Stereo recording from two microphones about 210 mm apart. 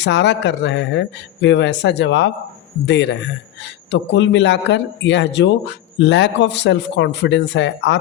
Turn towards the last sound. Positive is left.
turn(degrees=60)  # may be behind; listen again after turning